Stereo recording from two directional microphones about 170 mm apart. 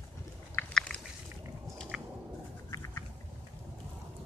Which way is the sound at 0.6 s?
5° left (ahead or behind).